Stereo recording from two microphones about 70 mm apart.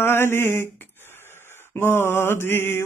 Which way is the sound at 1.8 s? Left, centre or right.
Left.